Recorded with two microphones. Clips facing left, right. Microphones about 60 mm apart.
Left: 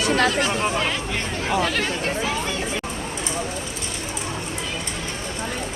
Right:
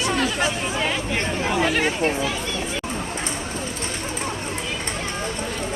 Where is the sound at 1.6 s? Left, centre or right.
Centre.